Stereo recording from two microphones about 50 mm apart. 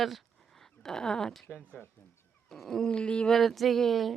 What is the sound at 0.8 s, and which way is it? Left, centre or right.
Speech, centre.